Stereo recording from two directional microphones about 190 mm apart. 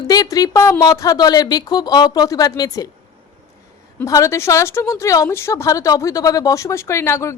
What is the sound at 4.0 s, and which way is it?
A woman's voice, 15° left (ahead or behind).